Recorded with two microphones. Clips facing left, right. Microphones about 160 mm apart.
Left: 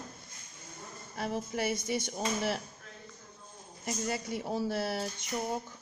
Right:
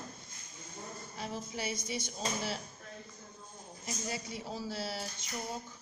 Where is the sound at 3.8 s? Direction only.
55° left (ahead or behind).